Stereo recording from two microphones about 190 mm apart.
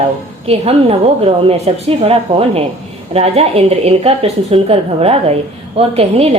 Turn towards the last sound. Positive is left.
turn(degrees=-30)  # may be behind; listen again after turning